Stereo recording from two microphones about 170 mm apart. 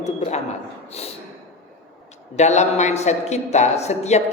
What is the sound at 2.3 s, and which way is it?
A man's voice, 40° left (ahead or behind).